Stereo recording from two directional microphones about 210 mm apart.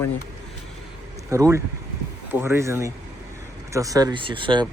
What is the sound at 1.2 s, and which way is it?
Speech, 15° right (ahead or behind).